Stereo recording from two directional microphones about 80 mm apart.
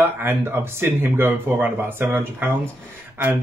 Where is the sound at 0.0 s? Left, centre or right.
Right.